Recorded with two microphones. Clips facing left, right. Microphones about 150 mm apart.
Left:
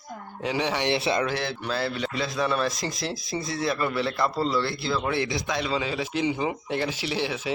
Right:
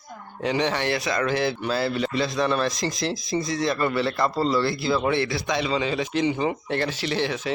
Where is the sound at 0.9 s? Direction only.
25° left (ahead or behind).